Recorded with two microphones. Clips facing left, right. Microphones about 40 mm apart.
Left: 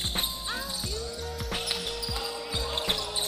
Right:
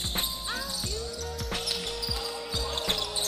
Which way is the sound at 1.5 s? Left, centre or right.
Centre.